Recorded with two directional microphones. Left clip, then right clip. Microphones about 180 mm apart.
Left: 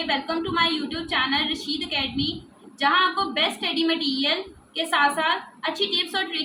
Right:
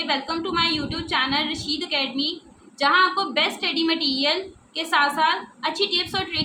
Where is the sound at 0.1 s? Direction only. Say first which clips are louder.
Even; 25° right (ahead or behind).